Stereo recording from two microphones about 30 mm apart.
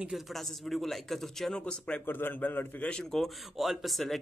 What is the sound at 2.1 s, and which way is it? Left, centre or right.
Speech, left.